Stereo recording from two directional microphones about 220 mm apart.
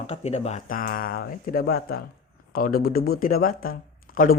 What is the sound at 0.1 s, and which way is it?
A man's voice, 30° left (ahead or behind).